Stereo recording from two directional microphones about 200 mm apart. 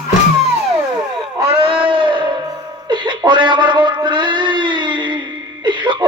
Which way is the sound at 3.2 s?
25° right (ahead or behind).